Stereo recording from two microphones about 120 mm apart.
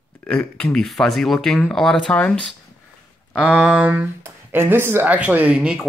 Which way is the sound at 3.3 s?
10° right (ahead or behind).